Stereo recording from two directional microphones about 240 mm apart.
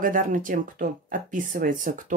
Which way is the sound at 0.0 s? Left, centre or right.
Right.